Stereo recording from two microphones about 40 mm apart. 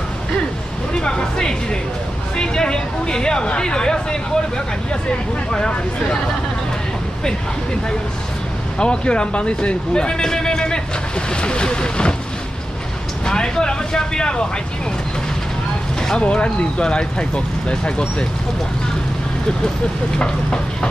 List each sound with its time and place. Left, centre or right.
0.9 s speech: left
8.7 s speech: left
13.2 s vehicle: left
16.0 s speech: left
20.2 s speech: left